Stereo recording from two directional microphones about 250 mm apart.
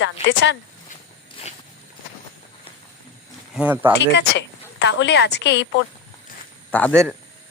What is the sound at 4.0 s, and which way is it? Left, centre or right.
A woman's voice, left.